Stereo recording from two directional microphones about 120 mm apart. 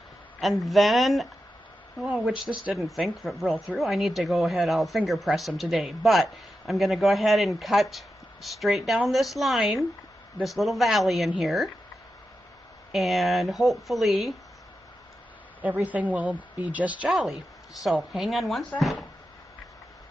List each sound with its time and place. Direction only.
0.4 s speech: centre (ahead or behind)
12.9 s speech: centre (ahead or behind)
15.6 s a woman's voice: 15° right (ahead or behind)